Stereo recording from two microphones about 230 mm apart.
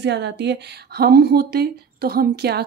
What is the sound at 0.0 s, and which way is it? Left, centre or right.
Speech, right.